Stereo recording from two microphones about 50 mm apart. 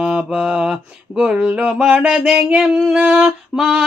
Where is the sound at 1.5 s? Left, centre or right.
Right.